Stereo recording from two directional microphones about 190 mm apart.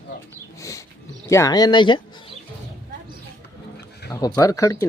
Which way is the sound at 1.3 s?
15° left (ahead or behind).